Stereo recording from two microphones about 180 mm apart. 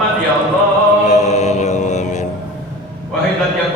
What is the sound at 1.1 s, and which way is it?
Chant, 40° left (ahead or behind).